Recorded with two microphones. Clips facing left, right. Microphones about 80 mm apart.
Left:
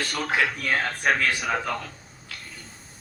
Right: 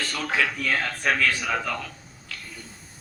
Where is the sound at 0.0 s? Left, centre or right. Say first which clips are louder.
Left 1 dB; centre.